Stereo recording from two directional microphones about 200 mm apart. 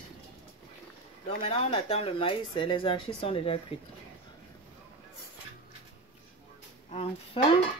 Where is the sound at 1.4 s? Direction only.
25° left (ahead or behind).